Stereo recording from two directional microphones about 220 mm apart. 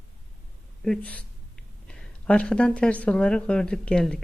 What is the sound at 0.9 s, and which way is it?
A woman's voice, 5° left (ahead or behind).